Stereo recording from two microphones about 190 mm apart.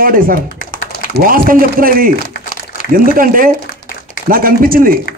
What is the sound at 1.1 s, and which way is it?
A man's voice, 50° right (ahead or behind).